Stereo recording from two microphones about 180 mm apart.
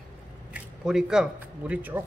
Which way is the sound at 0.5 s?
5° right (ahead or behind).